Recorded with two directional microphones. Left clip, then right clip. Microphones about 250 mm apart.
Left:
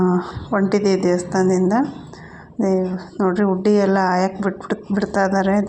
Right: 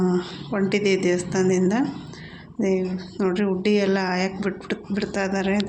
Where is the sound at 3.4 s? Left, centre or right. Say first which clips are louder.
Left 5 dB; centre.